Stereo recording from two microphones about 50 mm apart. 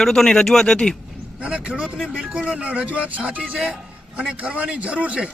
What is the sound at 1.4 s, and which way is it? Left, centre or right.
Speech, right.